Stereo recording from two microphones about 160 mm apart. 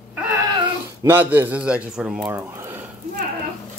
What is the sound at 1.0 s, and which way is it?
Speech, 10° right (ahead or behind).